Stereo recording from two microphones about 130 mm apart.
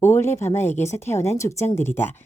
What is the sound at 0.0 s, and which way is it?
A woman's voice, 20° left (ahead or behind).